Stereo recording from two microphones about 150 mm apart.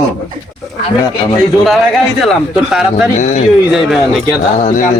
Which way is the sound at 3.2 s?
55° left (ahead or behind).